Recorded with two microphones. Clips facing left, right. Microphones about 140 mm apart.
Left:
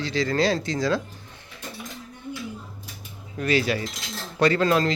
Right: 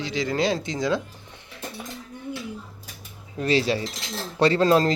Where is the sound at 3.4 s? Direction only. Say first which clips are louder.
Right 1 dB; 30° right (ahead or behind).